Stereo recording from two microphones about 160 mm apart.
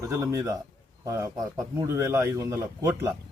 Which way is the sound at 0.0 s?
15° right (ahead or behind).